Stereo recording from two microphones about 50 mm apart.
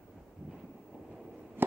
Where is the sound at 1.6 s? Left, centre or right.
Right.